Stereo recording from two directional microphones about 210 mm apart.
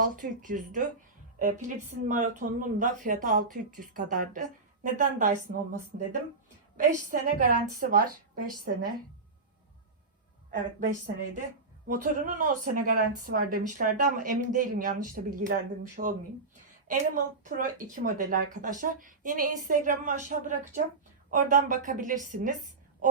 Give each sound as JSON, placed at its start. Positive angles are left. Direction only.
{"t": 0.0, "sound": "speech", "side_deg": -40}
{"t": 5.9, "sound": "a woman's voice", "side_deg": -50}
{"t": 6.7, "sound": "a woman's voice", "side_deg": -40}
{"t": 10.5, "sound": "a woman's voice", "side_deg": -40}